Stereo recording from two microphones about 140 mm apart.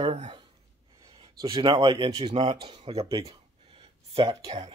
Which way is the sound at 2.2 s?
50° right (ahead or behind).